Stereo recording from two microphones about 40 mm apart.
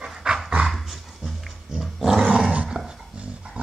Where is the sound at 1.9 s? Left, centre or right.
Centre.